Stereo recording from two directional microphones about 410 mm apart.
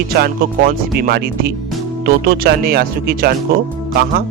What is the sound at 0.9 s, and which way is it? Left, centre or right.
Speech, right.